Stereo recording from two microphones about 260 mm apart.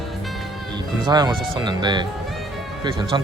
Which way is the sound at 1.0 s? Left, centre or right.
Centre.